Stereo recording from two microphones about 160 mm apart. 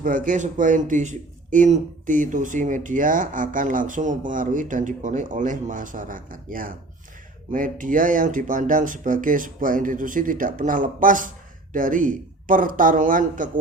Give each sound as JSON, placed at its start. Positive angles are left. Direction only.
{"t": 0.0, "sound": "speech", "side_deg": -55}